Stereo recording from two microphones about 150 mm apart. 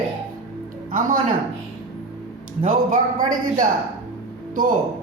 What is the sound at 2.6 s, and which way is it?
A woman's voice, 65° right (ahead or behind).